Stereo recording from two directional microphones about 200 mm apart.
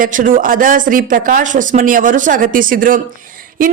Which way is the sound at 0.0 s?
40° right (ahead or behind).